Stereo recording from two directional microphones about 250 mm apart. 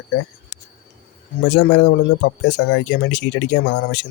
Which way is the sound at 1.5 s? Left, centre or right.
Left.